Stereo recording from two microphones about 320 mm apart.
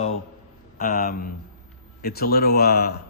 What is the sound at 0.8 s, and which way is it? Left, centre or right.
A man's voice, left.